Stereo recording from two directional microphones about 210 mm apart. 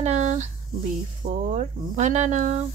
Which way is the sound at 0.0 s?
35° right (ahead or behind).